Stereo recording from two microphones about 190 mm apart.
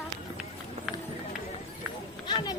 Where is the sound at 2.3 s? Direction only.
20° left (ahead or behind).